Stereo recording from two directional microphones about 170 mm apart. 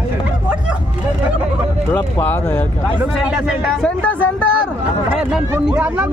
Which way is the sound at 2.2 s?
10° left (ahead or behind).